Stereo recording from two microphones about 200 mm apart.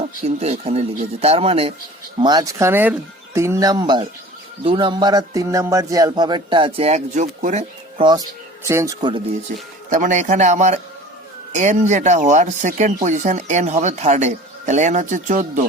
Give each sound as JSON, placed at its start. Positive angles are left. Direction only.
{"t": 0.0, "sound": "speech", "side_deg": -30}
{"t": 2.2, "sound": "speech", "side_deg": -20}
{"t": 8.0, "sound": "speech", "side_deg": -20}
{"t": 9.5, "sound": "speech", "side_deg": -40}